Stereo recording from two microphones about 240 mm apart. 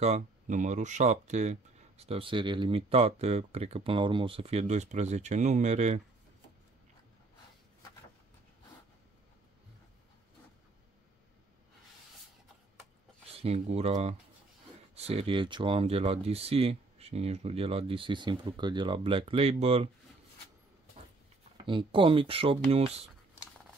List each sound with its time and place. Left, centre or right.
0.0 s speech: right
13.4 s speech: right
21.5 s speech: right